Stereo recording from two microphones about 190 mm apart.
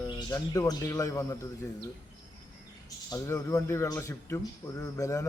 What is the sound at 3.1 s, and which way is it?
Speech, 15° left (ahead or behind).